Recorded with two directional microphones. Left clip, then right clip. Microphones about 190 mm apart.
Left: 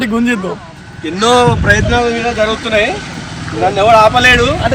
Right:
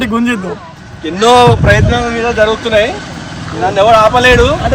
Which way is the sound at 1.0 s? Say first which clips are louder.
Right 3 dB; 20° right (ahead or behind).